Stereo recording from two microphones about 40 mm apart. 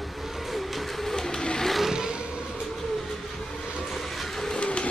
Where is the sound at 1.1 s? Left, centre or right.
Centre.